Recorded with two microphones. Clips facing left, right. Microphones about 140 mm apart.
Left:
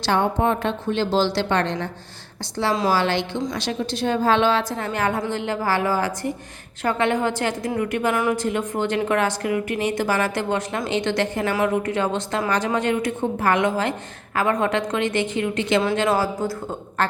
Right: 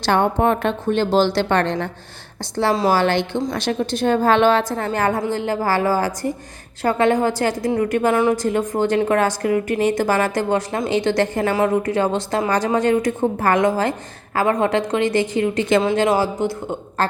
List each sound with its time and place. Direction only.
0.0 s a woman's voice: 55° right (ahead or behind); by 15.8 s 35° right (ahead or behind)
16.0 s speech: 25° right (ahead or behind)
17.0 s speech: 35° right (ahead or behind)